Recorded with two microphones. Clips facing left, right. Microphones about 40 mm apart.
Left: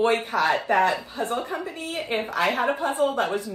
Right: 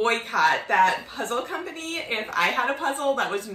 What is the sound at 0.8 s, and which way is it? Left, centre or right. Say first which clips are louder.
Speech: right 1 dB; right.